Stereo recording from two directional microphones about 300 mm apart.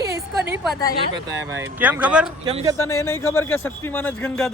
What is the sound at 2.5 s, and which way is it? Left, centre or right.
Speech, centre.